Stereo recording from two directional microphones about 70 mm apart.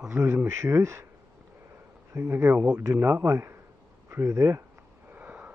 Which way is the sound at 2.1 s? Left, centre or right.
Right.